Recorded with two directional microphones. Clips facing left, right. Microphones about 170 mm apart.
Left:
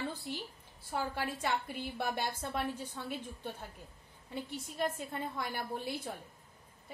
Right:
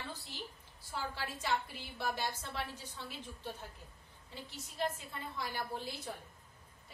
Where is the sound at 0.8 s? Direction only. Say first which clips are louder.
Left 5 dB; 55° left (ahead or behind).